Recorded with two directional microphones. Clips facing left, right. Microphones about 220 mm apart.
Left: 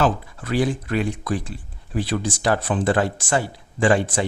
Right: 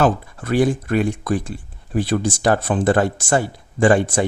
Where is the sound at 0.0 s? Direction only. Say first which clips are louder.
Right 3 dB; 50° right (ahead or behind).